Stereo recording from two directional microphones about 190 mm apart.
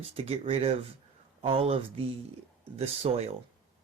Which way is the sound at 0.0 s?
30° right (ahead or behind).